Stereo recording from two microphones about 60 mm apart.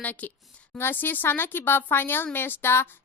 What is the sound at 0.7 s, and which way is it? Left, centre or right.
Speech, left.